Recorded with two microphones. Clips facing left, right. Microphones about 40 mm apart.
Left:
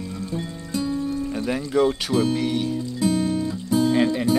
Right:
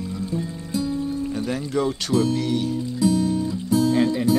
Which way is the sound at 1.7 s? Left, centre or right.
Centre.